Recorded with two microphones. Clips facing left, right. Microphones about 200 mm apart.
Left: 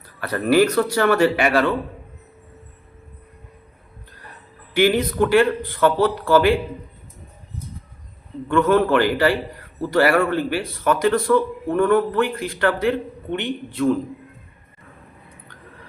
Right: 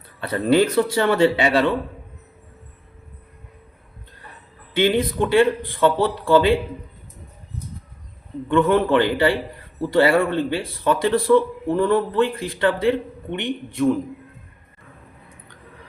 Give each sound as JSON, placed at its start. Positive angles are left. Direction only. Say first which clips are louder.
{"t": 0.2, "sound": "speech", "louder": "left 1 dB", "side_deg": -25}
{"t": 4.7, "sound": "speech", "louder": "left 1 dB", "side_deg": -20}
{"t": 8.4, "sound": "speech", "louder": "even", "side_deg": -20}